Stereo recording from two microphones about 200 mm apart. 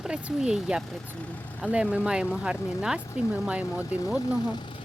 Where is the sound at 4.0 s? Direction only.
15° left (ahead or behind).